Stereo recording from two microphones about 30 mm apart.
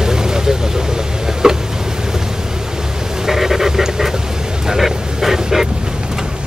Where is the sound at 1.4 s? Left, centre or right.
Right.